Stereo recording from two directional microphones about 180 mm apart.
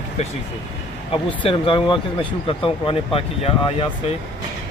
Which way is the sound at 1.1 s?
30° left (ahead or behind).